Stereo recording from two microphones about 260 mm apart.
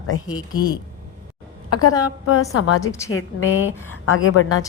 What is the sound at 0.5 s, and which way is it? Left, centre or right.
Speech, right.